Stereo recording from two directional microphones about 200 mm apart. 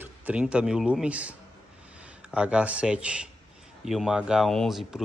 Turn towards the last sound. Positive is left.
turn(degrees=0)  # may be behind; listen again after turning